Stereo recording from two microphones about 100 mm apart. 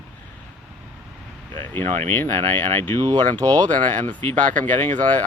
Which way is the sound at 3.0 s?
40° right (ahead or behind).